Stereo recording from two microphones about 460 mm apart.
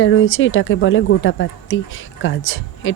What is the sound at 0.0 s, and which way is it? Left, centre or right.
Speech, left.